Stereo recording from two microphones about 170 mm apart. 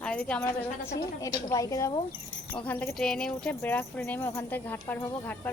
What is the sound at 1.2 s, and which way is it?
Speech, 20° left (ahead or behind).